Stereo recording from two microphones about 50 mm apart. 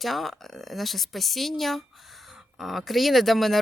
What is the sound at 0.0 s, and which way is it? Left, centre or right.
Speech, centre.